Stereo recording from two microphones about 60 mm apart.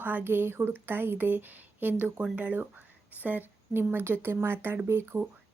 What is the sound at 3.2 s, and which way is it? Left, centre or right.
Speech, right.